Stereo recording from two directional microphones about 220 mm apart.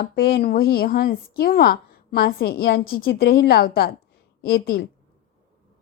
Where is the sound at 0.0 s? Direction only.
45° left (ahead or behind).